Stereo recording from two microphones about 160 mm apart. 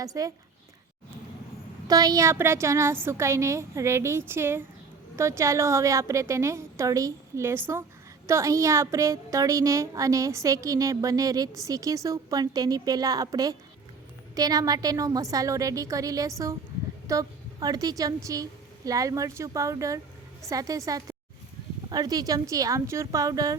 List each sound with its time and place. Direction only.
0.0 s a woman's voice: 20° right (ahead or behind)
1.9 s a woman's voice: 25° right (ahead or behind)